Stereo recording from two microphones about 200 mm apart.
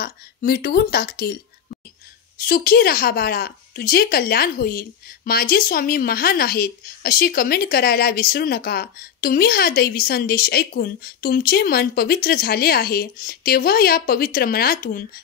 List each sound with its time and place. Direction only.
0.0 s a woman's voice: 50° left (ahead or behind)
2.4 s a woman's voice: 45° left (ahead or behind)